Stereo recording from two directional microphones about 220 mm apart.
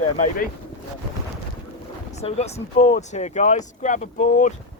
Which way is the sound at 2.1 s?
30° left (ahead or behind).